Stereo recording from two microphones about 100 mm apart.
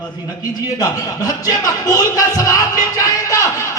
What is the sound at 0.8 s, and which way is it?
A man's voice, 40° left (ahead or behind).